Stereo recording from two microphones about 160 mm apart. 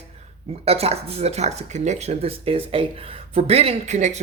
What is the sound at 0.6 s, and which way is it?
Speech, 40° right (ahead or behind).